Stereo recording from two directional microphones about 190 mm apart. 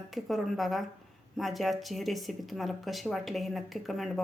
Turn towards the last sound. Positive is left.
turn(degrees=0)  # may be behind; listen again after turning